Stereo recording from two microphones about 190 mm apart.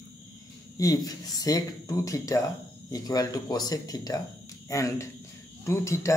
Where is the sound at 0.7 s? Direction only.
20° left (ahead or behind).